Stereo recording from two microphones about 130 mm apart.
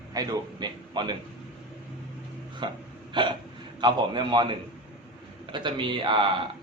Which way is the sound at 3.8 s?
35° right (ahead or behind).